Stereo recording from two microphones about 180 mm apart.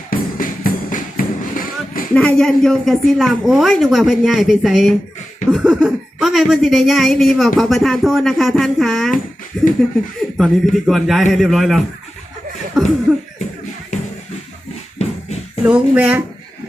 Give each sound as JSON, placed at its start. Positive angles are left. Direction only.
{"t": 0.1, "sound": "music", "side_deg": 50}
{"t": 2.1, "sound": "speech", "side_deg": 5}
{"t": 14.9, "sound": "music", "side_deg": 35}
{"t": 15.6, "sound": "speech", "side_deg": -10}